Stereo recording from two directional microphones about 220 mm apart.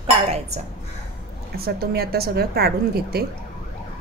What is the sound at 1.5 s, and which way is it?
A woman's voice, 45° right (ahead or behind).